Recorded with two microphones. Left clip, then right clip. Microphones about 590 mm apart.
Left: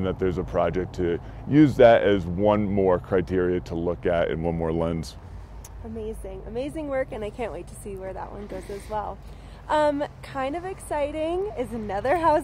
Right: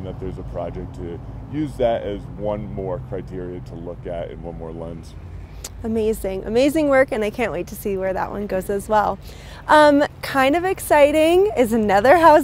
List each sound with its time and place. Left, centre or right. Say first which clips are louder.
0.0 s speech: left 6 dB; left
5.9 s speech: right 13 dB; right